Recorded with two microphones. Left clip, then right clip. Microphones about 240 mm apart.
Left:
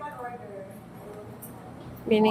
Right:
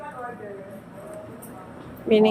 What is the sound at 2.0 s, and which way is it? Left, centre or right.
Speech, centre.